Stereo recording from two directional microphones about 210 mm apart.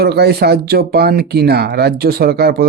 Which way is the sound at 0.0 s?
50° right (ahead or behind).